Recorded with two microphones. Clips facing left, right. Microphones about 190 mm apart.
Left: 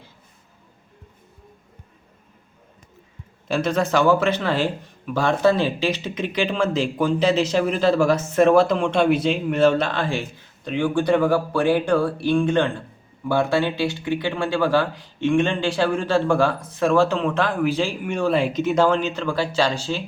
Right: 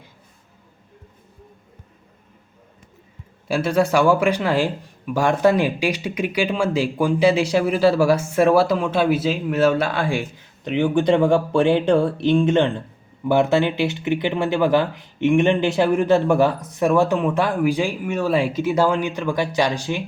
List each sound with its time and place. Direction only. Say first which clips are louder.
3.5 s a man's voice: right 2 dB; 10° right (ahead or behind)